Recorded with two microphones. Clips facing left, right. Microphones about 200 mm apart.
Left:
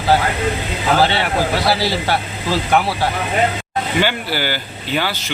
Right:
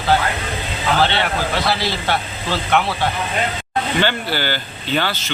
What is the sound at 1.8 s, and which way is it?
Speech, 40° left (ahead or behind).